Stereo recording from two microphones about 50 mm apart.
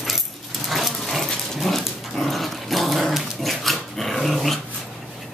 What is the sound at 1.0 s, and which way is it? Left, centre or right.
Dog, centre.